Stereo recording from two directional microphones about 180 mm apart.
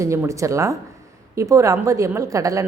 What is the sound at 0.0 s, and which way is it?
A woman's voice, 15° right (ahead or behind).